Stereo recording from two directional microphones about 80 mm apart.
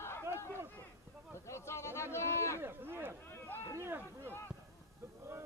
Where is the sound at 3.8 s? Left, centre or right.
Right.